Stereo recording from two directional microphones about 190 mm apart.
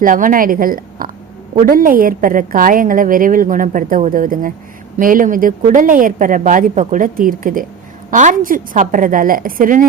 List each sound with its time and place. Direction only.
0.0 s a woman's voice: 45° right (ahead or behind)